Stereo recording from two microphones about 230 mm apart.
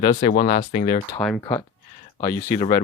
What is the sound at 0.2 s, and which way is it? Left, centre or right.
Speech, left.